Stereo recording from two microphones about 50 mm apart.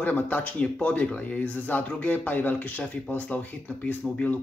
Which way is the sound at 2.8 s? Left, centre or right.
Left.